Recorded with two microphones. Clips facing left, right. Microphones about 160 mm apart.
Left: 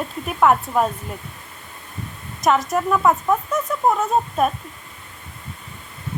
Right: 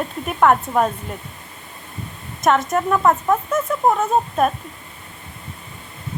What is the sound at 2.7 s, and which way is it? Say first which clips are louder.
Speech: right 1 dB; centre (ahead or behind).